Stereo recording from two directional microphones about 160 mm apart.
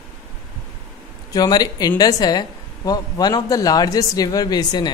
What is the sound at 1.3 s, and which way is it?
Speech, 25° left (ahead or behind).